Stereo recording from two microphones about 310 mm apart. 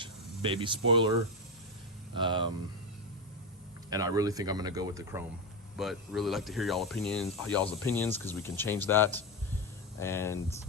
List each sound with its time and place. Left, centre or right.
0.0 s a sound: centre
0.9 s speech: centre
2.1 s speech: centre
3.8 s speech: centre